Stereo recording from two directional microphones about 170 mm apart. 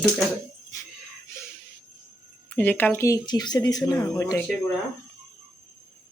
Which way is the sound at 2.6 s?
10° left (ahead or behind).